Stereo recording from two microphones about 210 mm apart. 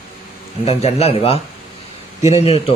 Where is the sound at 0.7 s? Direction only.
30° left (ahead or behind).